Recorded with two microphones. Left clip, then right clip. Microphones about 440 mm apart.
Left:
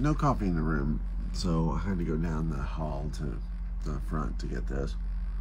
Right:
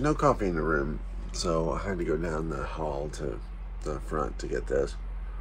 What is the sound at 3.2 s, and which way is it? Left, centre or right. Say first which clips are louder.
Speech: right 7 dB; right.